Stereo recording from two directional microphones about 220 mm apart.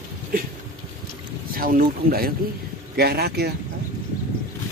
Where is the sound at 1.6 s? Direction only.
40° right (ahead or behind).